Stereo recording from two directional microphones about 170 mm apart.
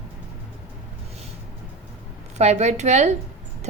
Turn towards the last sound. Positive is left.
turn(degrees=-40)  # may be behind; listen again after turning